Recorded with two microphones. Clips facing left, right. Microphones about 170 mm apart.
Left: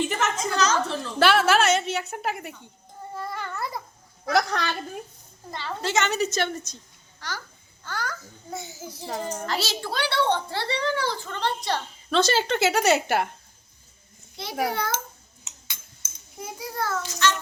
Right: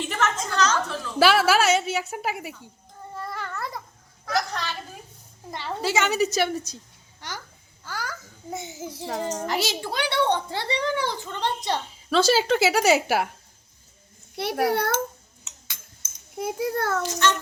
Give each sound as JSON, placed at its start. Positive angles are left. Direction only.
{"t": 0.2, "sound": "a sound", "side_deg": 10}
{"t": 1.2, "sound": "speech", "side_deg": -5}
{"t": 3.2, "sound": "babbling", "side_deg": 0}
{"t": 4.3, "sound": "speech", "side_deg": 65}
{"t": 5.5, "sound": "a child's voice", "side_deg": -15}
{"t": 7.9, "sound": "a child's voice", "side_deg": -10}
{"t": 8.5, "sound": "a child's voice", "side_deg": -25}
{"t": 12.1, "sound": "speech", "side_deg": -5}
{"t": 14.4, "sound": "a child's voice", "side_deg": -65}
{"t": 16.4, "sound": "a child's voice", "side_deg": -60}